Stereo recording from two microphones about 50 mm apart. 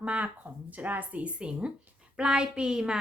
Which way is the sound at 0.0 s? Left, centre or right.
Right.